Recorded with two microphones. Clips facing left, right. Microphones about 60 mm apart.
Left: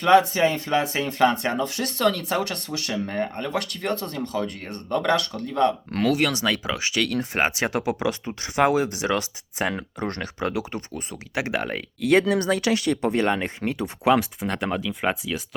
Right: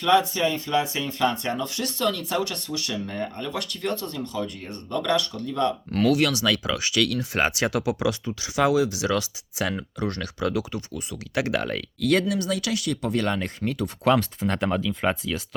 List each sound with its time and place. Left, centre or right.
0.0 s speech: left
0.4 s speech: left
0.8 s speech: left
2.3 s speech: left
8.3 s speech: left
11.3 s speech: left
12.3 s speech: left
14.1 s speech: centre